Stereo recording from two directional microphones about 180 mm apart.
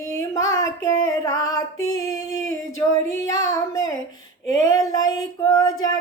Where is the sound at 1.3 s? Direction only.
20° left (ahead or behind).